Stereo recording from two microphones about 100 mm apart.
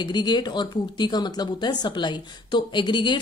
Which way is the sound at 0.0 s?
45° left (ahead or behind).